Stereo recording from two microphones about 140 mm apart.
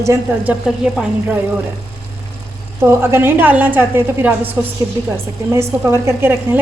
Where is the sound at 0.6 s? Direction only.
Centre (ahead or behind).